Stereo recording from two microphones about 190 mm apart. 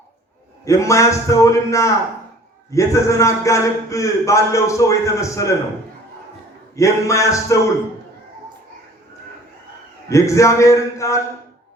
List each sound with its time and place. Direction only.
0.6 s a man's voice: 15° left (ahead or behind)
6.7 s a man's voice: 15° left (ahead or behind)
10.1 s a man's voice: 15° left (ahead or behind)